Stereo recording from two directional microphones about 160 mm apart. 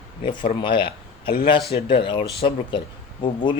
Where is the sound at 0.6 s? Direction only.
30° left (ahead or behind).